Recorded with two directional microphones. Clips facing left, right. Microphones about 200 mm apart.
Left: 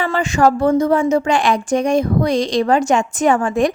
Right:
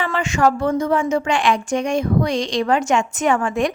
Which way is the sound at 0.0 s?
35° left (ahead or behind).